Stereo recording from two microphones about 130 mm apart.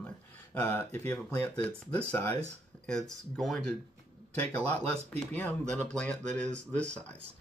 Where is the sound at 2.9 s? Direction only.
5° left (ahead or behind).